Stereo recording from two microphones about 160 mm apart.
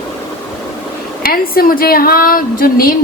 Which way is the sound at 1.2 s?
65° left (ahead or behind).